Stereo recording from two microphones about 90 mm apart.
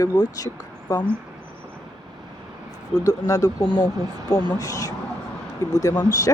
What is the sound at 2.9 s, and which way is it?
Speech, 40° left (ahead or behind).